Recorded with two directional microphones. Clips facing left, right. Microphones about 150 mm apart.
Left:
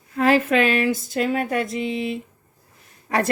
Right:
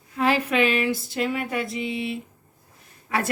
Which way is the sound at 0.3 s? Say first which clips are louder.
Left 4 dB; 45° left (ahead or behind).